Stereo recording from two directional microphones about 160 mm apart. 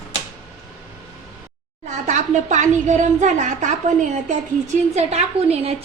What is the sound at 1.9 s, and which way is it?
A woman's voice, 50° right (ahead or behind).